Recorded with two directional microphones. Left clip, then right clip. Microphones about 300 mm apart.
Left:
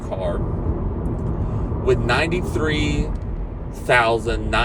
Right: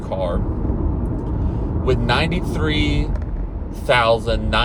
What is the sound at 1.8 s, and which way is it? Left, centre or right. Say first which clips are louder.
Speech: even; centre.